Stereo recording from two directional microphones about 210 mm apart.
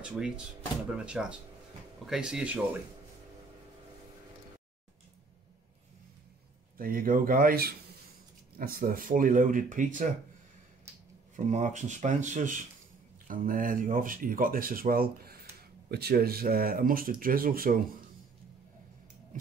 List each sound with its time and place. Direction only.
0.0 s speech: 5° right (ahead or behind)
6.8 s speech: 40° right (ahead or behind)
11.3 s speech: 35° right (ahead or behind)
19.3 s a sound: 40° right (ahead or behind)